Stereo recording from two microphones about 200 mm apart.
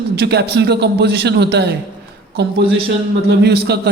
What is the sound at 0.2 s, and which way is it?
Speech, 55° right (ahead or behind).